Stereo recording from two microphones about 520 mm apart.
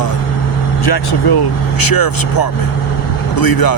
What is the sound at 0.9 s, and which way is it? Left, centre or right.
Speech, left.